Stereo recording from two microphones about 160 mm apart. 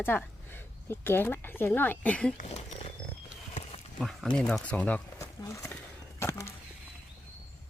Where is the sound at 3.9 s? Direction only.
5° left (ahead or behind).